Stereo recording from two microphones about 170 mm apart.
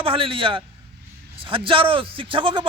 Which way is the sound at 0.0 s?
30° right (ahead or behind).